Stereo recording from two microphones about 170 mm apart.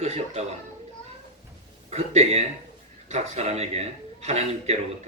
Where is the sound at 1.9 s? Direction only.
35° right (ahead or behind).